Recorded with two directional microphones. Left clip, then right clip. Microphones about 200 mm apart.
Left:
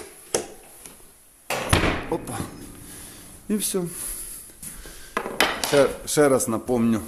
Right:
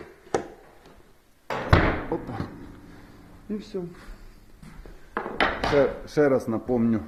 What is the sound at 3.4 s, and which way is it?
Speech, 55° left (ahead or behind).